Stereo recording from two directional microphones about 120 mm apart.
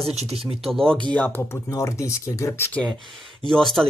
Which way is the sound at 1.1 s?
15° left (ahead or behind).